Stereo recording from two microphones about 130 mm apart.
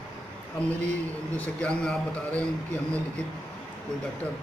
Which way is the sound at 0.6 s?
65° right (ahead or behind).